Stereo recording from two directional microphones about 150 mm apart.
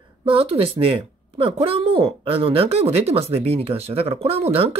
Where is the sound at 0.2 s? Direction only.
40° right (ahead or behind).